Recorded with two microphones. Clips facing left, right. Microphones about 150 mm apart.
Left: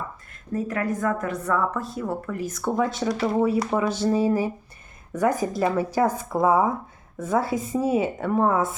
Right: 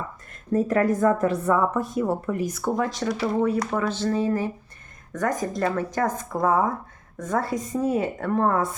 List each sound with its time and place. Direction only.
0.5 s speech: 40° right (ahead or behind); by 2.5 s 20° right (ahead or behind)
2.5 s speech: 5° right (ahead or behind)